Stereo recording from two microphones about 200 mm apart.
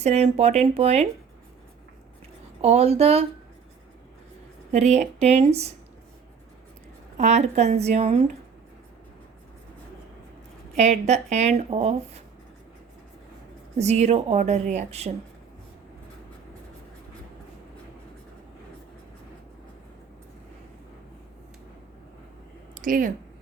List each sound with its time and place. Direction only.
0.0 s speech: 35° right (ahead or behind)
2.6 s speech: 30° right (ahead or behind)
4.7 s speech: 35° right (ahead or behind)
7.2 s speech: 35° right (ahead or behind)
10.8 s speech: 35° right (ahead or behind)
13.7 s speech: 35° right (ahead or behind)
22.7 s speech: 40° right (ahead or behind)